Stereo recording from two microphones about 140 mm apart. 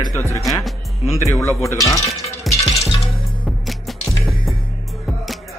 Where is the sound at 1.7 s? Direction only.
25° left (ahead or behind).